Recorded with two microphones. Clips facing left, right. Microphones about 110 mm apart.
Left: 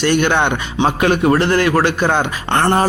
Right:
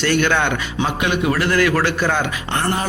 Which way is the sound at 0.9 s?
40° left (ahead or behind).